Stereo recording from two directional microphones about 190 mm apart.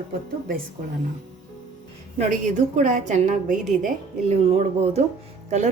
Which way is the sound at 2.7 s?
40° right (ahead or behind).